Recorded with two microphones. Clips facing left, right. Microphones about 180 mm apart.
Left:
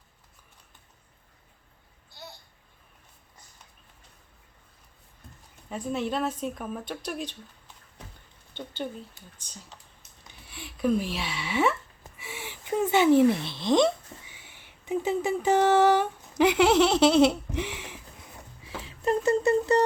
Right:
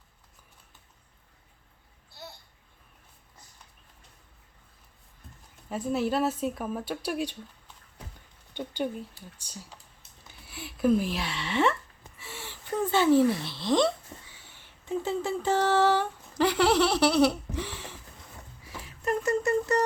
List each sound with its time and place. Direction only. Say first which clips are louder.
5.6 s speech: right 2 dB; 5° right (ahead or behind)
8.5 s speech: right 3 dB; 10° right (ahead or behind); by 11.8 s 5° left (ahead or behind)
12.1 s a sound: left 3 dB; 15° left (ahead or behind)